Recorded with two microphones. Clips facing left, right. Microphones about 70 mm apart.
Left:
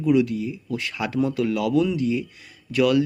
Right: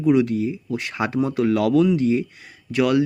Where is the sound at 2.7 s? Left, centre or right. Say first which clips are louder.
Even; right.